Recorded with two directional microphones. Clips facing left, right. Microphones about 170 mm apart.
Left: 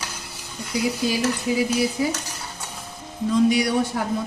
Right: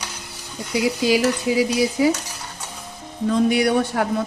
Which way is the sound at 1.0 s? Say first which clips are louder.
Right 4 dB; 85° right.